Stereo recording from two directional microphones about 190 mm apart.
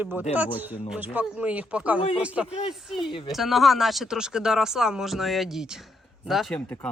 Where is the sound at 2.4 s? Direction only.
35° left (ahead or behind).